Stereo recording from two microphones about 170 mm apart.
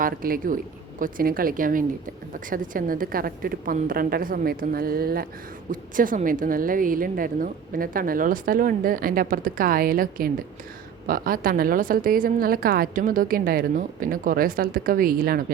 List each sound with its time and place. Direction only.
0.0 s a woman's voice: 55° right (ahead or behind)